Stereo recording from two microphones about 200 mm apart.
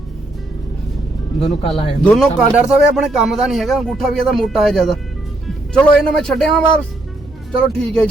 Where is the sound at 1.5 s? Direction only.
25° left (ahead or behind).